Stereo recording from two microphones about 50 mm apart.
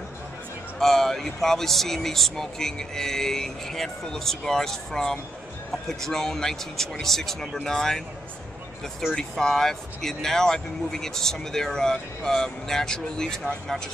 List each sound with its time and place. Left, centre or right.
0.7 s speech: centre
9.1 s speech: centre